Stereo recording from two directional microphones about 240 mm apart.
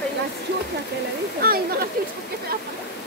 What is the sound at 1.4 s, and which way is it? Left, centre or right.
Speech, right.